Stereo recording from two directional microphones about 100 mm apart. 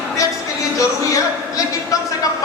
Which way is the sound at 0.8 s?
35° left (ahead or behind).